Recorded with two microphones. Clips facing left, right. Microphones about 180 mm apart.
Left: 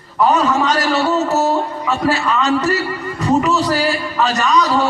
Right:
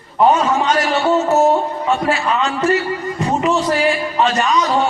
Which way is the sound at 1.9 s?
35° left (ahead or behind).